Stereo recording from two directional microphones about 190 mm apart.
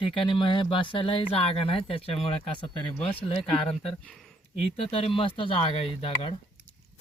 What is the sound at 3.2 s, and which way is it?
Speech, 30° left (ahead or behind).